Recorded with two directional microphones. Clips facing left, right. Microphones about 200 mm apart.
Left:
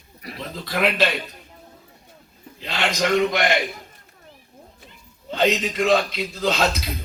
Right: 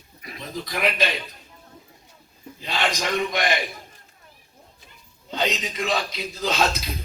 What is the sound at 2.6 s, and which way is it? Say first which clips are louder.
Speech: left 2 dB; 65° left (ahead or behind).